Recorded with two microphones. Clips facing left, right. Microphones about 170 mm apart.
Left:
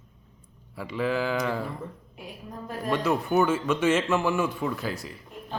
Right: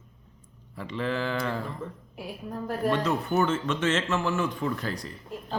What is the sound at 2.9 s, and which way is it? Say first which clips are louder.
Speech: left 3 dB; 10° left (ahead or behind).